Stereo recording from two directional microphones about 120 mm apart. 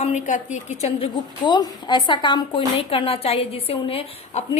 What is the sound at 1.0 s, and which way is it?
A woman's voice, 40° left (ahead or behind).